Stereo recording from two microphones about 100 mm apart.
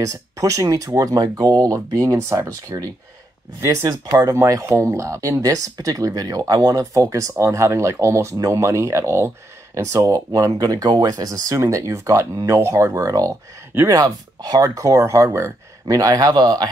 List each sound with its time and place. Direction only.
0.0 s speech: 35° right (ahead or behind)